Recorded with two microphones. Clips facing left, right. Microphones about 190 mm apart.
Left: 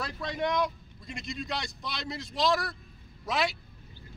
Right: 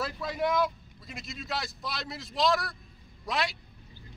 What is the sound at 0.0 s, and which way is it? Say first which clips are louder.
A man's voice: right 1 dB; 5° right (ahead or behind).